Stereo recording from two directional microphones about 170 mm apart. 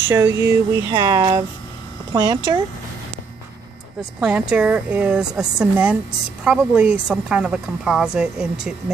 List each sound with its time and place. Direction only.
0.1 s speech: 15° right (ahead or behind)
4.2 s a woman's voice: 5° right (ahead or behind)